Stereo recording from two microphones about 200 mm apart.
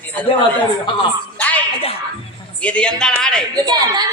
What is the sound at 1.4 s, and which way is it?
Music, 10° left (ahead or behind).